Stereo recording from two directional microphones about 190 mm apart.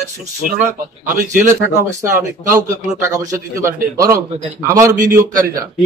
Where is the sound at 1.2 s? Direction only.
40° right (ahead or behind).